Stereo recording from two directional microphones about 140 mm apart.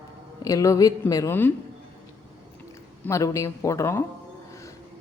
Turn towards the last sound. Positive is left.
turn(degrees=20)  # may be behind; listen again after turning